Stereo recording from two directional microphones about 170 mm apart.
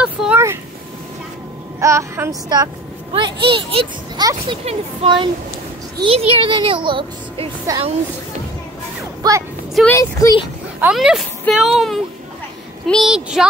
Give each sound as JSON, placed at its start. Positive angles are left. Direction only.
{"t": 0.0, "sound": "vehicle", "side_deg": -5}
{"t": 1.8, "sound": "a woman's voice", "side_deg": -15}
{"t": 3.1, "sound": "speech", "side_deg": -30}
{"t": 9.2, "sound": "speech", "side_deg": -20}
{"t": 9.8, "sound": "speech", "side_deg": 15}
{"t": 10.8, "sound": "speech", "side_deg": -5}
{"t": 12.8, "sound": "speech", "side_deg": 0}